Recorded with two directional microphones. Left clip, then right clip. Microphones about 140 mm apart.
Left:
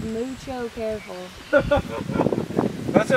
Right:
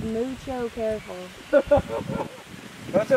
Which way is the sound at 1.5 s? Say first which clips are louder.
Even; 35° left (ahead or behind).